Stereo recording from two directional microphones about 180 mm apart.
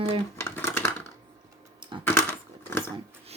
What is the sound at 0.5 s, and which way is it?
Dishes, 10° left (ahead or behind).